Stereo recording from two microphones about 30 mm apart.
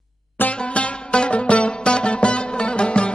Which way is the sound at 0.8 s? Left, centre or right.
Left.